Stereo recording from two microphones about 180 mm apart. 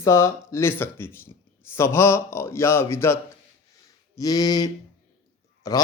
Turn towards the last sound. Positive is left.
turn(degrees=20)  # may be behind; listen again after turning